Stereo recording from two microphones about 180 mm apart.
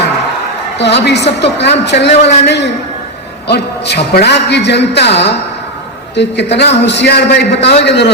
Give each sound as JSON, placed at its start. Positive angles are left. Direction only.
{"t": 0.8, "sound": "a man's voice", "side_deg": 70}